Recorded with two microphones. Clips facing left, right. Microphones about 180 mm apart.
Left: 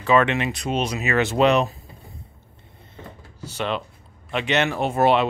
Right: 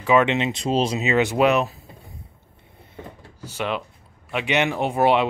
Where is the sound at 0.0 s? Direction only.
15° right (ahead or behind).